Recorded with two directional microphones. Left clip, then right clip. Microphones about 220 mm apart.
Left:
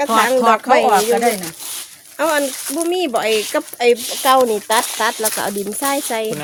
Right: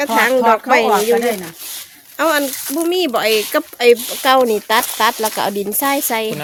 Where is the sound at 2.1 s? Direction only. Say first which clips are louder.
Right 1 dB; 45° right (ahead or behind).